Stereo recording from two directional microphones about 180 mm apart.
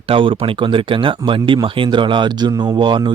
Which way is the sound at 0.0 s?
30° right (ahead or behind).